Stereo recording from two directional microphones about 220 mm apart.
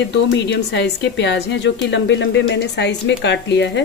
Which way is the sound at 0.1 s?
55° left (ahead or behind).